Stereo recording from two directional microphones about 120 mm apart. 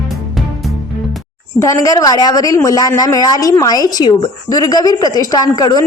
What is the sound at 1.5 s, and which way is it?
A woman's voice, 25° left (ahead or behind).